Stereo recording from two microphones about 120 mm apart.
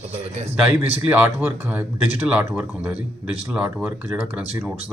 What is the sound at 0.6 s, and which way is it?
Speech, 10° right (ahead or behind).